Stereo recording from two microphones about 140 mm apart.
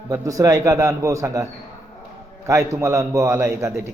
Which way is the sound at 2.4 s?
20° right (ahead or behind).